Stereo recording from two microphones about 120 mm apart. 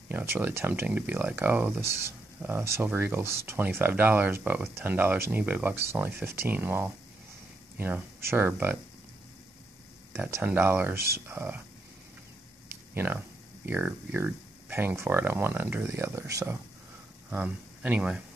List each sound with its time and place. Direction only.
0.1 s speech: 15° right (ahead or behind)
10.1 s speech: 15° right (ahead or behind)
12.9 s speech: 15° right (ahead or behind)
17.3 s speech: 10° right (ahead or behind)